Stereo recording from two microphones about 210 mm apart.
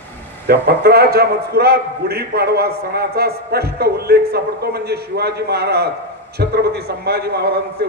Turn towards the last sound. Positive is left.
turn(degrees=-50)  # may be behind; listen again after turning